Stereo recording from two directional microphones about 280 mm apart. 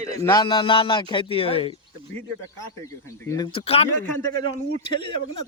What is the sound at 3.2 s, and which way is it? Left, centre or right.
Speech, centre.